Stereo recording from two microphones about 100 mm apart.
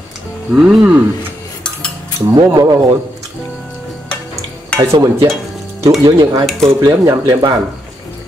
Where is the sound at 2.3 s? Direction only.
40° right (ahead or behind).